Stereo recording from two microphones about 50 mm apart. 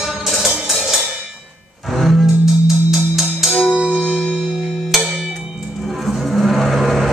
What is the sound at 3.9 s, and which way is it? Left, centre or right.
Music, left.